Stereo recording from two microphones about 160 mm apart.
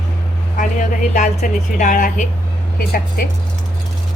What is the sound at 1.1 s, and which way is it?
A woman's voice, 50° left (ahead or behind).